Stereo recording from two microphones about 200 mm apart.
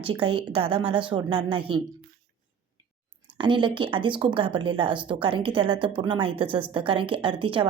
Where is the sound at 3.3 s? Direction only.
25° right (ahead or behind).